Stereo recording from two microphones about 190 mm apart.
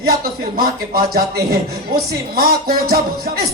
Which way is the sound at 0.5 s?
50° right (ahead or behind).